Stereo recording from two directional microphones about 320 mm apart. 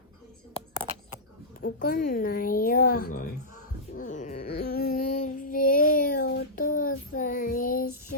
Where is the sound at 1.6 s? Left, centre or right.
Left.